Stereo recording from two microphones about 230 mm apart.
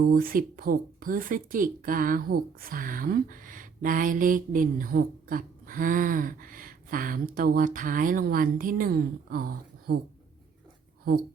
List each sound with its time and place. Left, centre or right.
0.0 s a woman's voice: right